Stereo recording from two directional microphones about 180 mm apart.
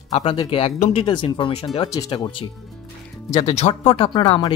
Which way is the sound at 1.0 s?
25° left (ahead or behind).